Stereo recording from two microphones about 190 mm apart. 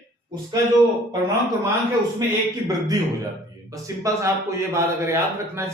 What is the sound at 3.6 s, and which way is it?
Speech, 15° right (ahead or behind).